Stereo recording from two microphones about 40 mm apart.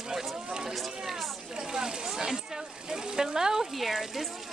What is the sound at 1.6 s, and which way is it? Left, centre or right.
Speech, centre.